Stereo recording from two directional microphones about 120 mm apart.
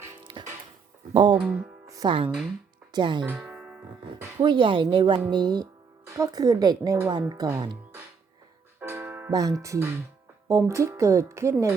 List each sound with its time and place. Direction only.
0.3 s music: 40° right (ahead or behind)
1.1 s speech: 40° right (ahead or behind)
1.5 s speech: 10° right (ahead or behind)
2.0 s a woman's voice: 45° right (ahead or behind)
3.2 s music: 10° right (ahead or behind)
4.4 s a woman's voice: 45° right (ahead or behind)
8.8 s music: 20° right (ahead or behind)
9.3 s speech: 30° right (ahead or behind)